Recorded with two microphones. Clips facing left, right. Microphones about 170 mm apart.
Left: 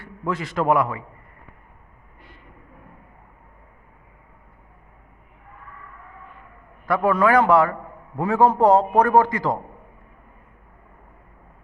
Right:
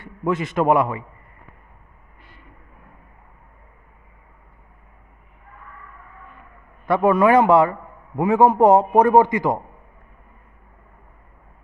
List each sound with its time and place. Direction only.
0.0 s a man's voice: 20° right (ahead or behind)
6.8 s a man's voice: 25° right (ahead or behind)